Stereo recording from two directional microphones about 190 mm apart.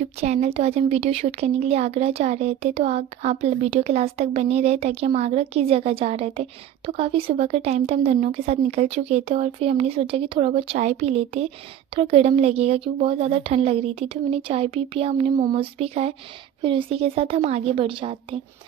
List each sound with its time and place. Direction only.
0.2 s speech: 35° right (ahead or behind)